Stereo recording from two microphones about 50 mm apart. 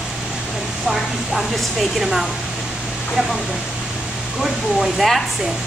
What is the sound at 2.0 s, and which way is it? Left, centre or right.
Speech, centre.